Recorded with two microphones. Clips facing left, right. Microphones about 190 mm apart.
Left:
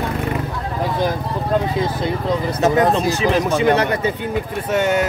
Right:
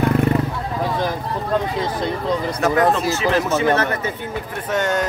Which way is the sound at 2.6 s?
20° left (ahead or behind).